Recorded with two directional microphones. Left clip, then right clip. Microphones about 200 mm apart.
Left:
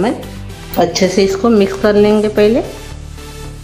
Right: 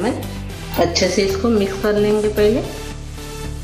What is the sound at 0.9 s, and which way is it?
Speech, 45° left (ahead or behind).